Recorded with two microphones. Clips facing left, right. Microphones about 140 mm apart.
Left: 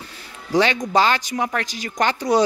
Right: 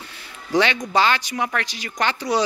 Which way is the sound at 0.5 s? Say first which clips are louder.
Left 2 dB; 35° left (ahead or behind).